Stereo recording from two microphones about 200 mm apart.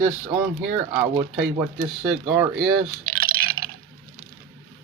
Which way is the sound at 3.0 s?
45° right (ahead or behind).